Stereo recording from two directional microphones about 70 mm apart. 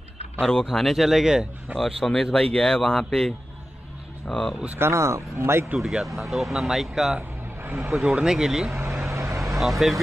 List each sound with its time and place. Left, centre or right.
0.4 s speech: centre
1.8 s speech: centre
4.7 s speech: right
5.8 s speech: centre
7.2 s vehicle: right
7.9 s speech: centre
8.7 s vehicle: right
9.6 s speech: centre